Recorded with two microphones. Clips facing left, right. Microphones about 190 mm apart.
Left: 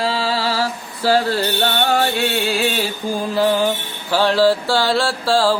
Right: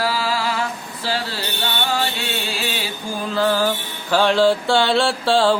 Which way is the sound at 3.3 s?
20° left (ahead or behind).